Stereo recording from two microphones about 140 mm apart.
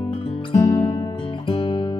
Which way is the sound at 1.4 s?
40° left (ahead or behind).